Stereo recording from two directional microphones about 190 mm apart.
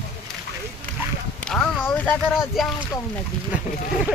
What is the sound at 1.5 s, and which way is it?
Speech, 5° left (ahead or behind).